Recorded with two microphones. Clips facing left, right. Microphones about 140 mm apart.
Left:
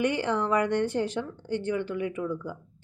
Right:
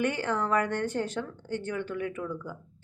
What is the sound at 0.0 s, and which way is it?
A woman's voice, 15° left (ahead or behind).